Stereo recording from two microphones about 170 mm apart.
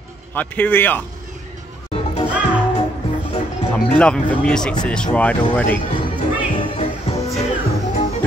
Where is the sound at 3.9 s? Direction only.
5° left (ahead or behind).